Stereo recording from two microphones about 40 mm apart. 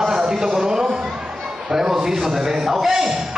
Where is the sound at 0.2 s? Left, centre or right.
Centre.